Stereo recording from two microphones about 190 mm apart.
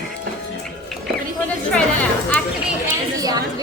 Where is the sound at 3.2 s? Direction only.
20° right (ahead or behind).